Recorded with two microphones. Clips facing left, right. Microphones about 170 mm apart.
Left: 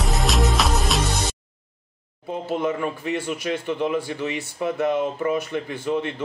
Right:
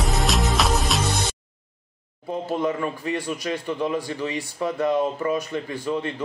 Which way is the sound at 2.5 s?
20° left (ahead or behind).